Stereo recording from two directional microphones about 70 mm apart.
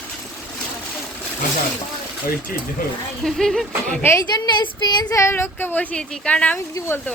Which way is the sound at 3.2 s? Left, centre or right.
Centre.